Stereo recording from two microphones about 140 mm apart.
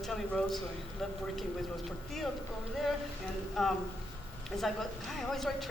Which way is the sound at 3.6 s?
Centre (ahead or behind).